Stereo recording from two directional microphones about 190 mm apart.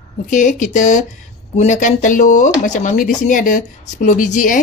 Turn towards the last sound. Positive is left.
turn(degrees=45)  # may be behind; listen again after turning